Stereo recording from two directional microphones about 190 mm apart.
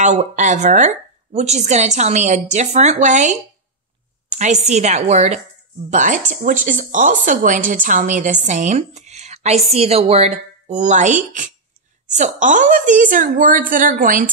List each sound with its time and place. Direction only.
0.0 s a woman's voice: 40° right (ahead or behind)